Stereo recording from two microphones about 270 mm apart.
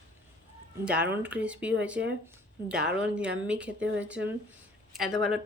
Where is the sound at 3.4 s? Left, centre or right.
Centre.